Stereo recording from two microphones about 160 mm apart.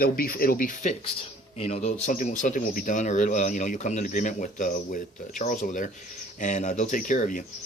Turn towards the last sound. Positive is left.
turn(degrees=55)  # may be behind; listen again after turning